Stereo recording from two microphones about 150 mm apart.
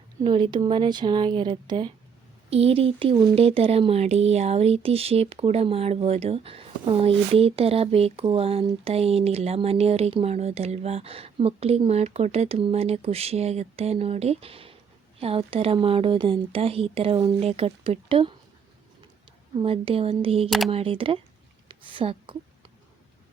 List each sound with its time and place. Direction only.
0.3 s speech: 30° right (ahead or behind)
19.5 s speech: 40° right (ahead or behind)
21.7 s a sound: 35° right (ahead or behind)